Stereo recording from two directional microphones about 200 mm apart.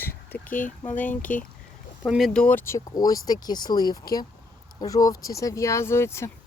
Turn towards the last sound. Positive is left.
turn(degrees=15)  # may be behind; listen again after turning